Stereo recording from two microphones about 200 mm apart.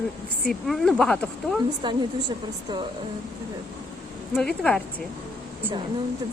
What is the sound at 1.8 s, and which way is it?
Speech, 20° right (ahead or behind).